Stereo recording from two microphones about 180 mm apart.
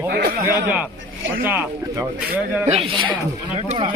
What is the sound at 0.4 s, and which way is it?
Speech, 10° right (ahead or behind).